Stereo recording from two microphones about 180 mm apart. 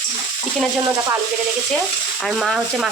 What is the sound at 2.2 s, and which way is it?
Speech, centre (ahead or behind).